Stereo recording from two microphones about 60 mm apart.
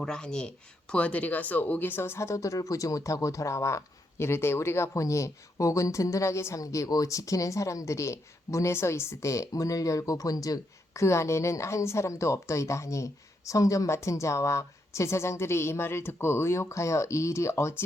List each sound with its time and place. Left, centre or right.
0.0 s speech: centre; by 6.6 s left
6.6 s speech: left